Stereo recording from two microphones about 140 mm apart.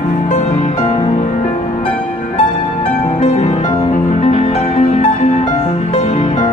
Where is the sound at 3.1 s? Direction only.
45° left (ahead or behind).